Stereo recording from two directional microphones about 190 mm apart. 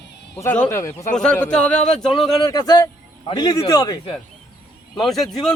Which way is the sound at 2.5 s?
20° left (ahead or behind).